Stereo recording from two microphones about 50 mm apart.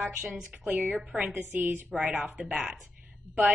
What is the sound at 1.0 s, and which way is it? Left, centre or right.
Speech, centre.